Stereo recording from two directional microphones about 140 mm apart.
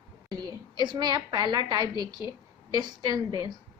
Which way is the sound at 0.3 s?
30° right (ahead or behind).